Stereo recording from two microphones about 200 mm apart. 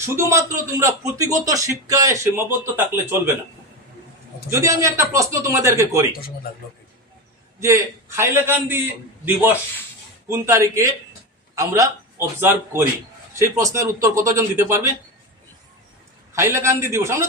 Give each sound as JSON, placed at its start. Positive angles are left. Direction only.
{"t": 0.0, "sound": "a man's voice", "side_deg": -15}
{"t": 4.6, "sound": "a man's voice", "side_deg": -15}
{"t": 7.6, "sound": "a man's voice", "side_deg": -15}
{"t": 16.3, "sound": "a man's voice", "side_deg": -15}